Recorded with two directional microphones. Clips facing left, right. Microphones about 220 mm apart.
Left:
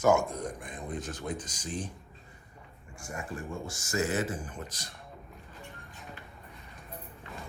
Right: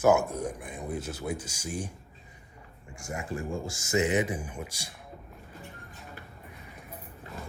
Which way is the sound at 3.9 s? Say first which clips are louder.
Right 4 dB; 15° right (ahead or behind).